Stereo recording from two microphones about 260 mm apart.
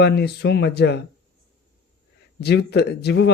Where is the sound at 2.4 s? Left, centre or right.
Left.